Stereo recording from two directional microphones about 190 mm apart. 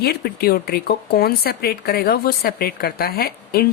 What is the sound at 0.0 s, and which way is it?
Speech, 55° left (ahead or behind).